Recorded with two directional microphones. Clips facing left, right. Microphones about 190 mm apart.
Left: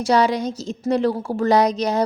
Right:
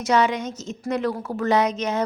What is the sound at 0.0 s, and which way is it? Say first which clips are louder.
A woman's voice: left 3 dB; 35° left (ahead or behind).